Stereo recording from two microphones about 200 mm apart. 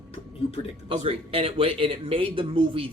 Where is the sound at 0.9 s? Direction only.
30° right (ahead or behind).